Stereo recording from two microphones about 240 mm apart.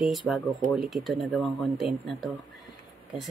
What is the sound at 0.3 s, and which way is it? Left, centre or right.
Speech, centre.